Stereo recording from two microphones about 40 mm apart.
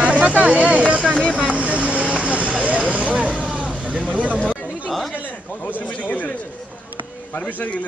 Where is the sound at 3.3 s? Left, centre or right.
Right.